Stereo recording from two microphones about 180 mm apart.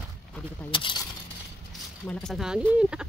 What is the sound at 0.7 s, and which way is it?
Speech, 25° left (ahead or behind).